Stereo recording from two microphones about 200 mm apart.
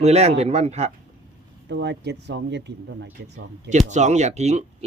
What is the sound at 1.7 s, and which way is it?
Speech, 60° right (ahead or behind).